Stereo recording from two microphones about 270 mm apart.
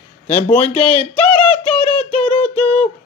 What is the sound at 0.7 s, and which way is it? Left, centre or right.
Speech, left.